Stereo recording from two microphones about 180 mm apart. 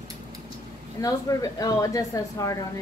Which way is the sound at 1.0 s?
20° left (ahead or behind).